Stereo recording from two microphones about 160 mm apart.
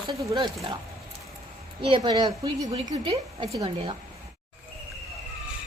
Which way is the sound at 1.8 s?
30° right (ahead or behind).